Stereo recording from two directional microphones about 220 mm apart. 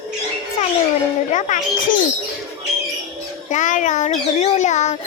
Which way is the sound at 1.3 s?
35° left (ahead or behind).